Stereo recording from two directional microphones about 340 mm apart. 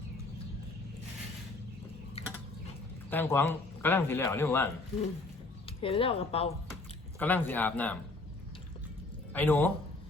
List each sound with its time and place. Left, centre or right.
2.2 s a sound: centre
3.1 s a man's voice: centre
7.2 s a man's voice: centre
9.3 s a man's voice: centre